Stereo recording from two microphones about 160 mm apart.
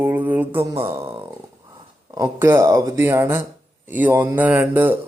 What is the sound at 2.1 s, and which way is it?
Speech, 15° right (ahead or behind).